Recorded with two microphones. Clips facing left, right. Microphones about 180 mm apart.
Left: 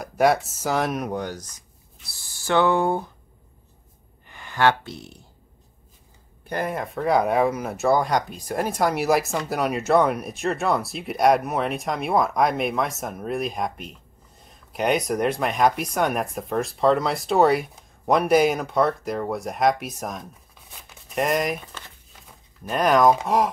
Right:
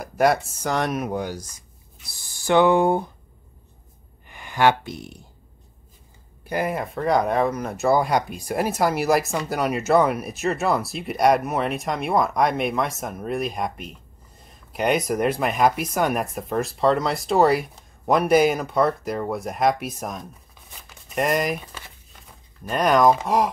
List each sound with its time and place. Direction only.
0.0 s speech: centre (ahead or behind); by 3.1 s 15° right (ahead or behind)
4.3 s speech: 15° right (ahead or behind)
6.4 s speech: 10° right (ahead or behind)